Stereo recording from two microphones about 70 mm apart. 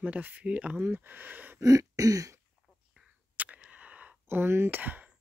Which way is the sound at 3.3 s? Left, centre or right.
Right.